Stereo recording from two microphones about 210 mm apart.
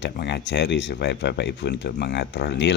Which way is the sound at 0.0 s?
55° left (ahead or behind).